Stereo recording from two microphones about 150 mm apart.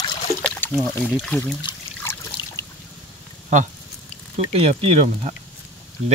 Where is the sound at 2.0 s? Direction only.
20° left (ahead or behind).